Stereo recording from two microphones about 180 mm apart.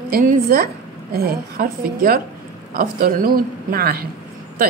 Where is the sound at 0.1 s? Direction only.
50° right (ahead or behind).